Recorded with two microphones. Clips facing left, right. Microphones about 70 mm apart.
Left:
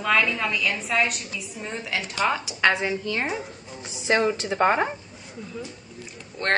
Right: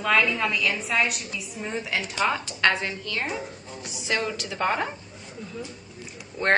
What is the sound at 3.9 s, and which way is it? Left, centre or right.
A woman's voice, left.